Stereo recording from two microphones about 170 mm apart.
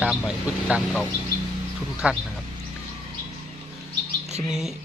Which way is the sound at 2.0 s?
5° right (ahead or behind).